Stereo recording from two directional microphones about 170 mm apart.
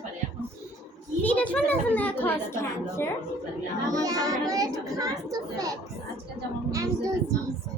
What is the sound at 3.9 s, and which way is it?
A child's voice, 20° right (ahead or behind).